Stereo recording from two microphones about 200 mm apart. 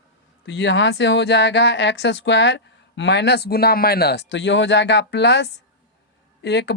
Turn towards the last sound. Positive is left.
turn(degrees=60)  # may be behind; listen again after turning